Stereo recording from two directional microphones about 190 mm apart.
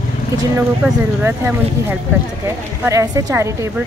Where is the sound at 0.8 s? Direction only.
10° right (ahead or behind).